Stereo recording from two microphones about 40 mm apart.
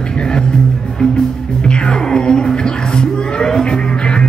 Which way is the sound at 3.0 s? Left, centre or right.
Left.